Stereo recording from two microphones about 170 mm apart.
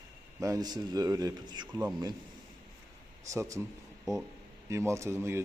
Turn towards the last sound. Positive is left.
turn(degrees=-15)  # may be behind; listen again after turning